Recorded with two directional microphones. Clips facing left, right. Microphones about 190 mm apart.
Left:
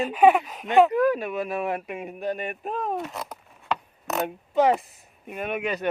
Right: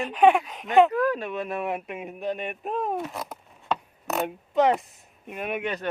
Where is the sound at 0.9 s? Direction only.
10° left (ahead or behind).